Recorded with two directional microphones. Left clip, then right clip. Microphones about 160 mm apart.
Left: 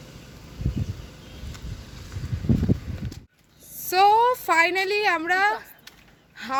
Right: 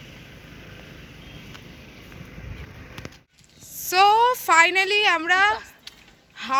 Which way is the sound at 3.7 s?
5° left (ahead or behind).